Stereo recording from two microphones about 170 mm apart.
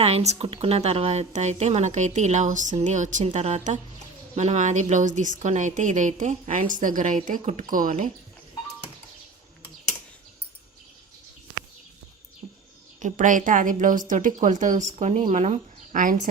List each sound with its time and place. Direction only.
0.0 s a woman's voice: 40° right (ahead or behind)
13.0 s a woman's voice: 50° right (ahead or behind)